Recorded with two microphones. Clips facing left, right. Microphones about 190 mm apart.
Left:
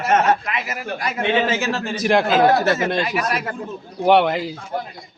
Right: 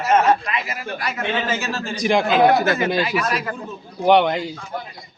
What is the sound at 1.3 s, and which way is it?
Speech, 65° left (ahead or behind).